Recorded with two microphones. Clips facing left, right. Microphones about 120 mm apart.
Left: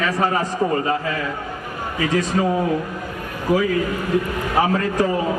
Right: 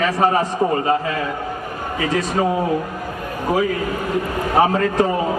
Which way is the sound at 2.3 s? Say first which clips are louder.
Right 2 dB; 30° right (ahead or behind).